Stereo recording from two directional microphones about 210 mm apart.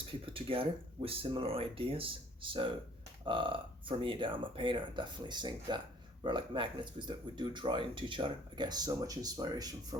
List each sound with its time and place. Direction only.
0.3 s speech: 25° right (ahead or behind)